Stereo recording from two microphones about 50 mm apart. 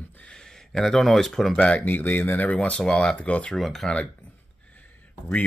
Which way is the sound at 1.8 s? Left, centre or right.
Left.